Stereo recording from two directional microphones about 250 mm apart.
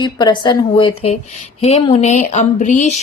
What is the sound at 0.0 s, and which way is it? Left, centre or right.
A woman's voice, centre.